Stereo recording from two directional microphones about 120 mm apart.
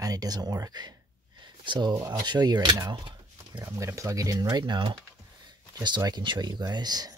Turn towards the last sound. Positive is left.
turn(degrees=-35)  # may be behind; listen again after turning